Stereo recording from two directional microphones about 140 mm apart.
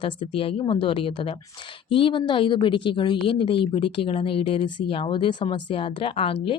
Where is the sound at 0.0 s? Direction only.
40° left (ahead or behind).